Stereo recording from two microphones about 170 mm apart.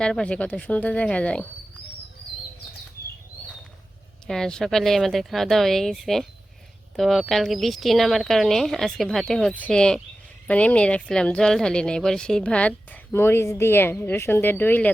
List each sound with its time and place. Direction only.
0.0 s speech: 5° left (ahead or behind)
4.3 s speech: 5° left (ahead or behind)